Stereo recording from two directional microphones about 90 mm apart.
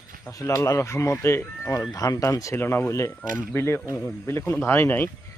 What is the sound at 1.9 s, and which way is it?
Speech, 45° left (ahead or behind).